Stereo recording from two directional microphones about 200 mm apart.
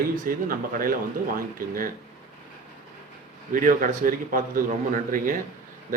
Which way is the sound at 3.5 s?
45° right (ahead or behind).